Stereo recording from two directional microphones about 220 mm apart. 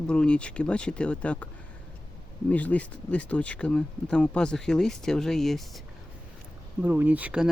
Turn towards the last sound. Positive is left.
turn(degrees=-5)  # may be behind; listen again after turning